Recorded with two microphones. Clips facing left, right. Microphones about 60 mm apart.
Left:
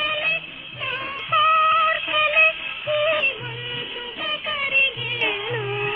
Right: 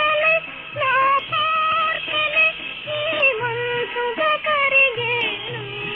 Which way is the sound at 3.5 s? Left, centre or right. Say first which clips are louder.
Right 10 dB; right.